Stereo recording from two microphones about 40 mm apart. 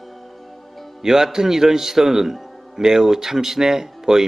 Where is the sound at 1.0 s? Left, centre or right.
Centre.